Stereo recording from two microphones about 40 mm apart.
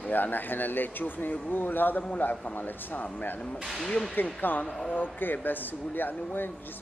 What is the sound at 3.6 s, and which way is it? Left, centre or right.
Speech, centre.